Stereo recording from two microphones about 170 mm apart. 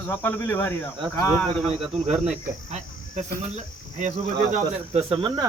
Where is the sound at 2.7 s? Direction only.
40° right (ahead or behind).